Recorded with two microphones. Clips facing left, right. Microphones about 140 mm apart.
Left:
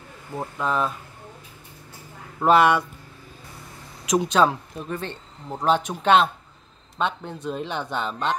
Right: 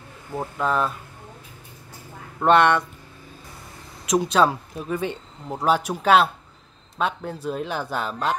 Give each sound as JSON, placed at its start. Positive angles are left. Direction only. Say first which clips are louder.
{"t": 0.4, "sound": "speech", "louder": "right 1 dB", "side_deg": 0}
{"t": 2.4, "sound": "speech", "louder": "even", "side_deg": 5}
{"t": 4.0, "sound": "speech", "louder": "even", "side_deg": 0}